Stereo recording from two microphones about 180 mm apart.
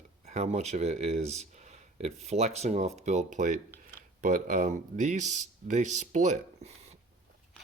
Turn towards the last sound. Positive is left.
turn(degrees=-35)  # may be behind; listen again after turning